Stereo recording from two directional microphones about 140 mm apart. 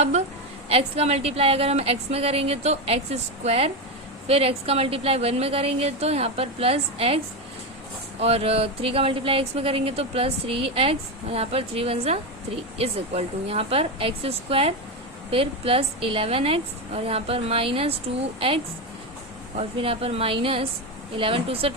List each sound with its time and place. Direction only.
0.7 s speech: 45° right (ahead or behind)
8.2 s a woman's voice: 45° right (ahead or behind)